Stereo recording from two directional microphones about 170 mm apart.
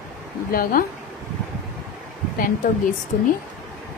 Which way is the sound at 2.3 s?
55° left (ahead or behind).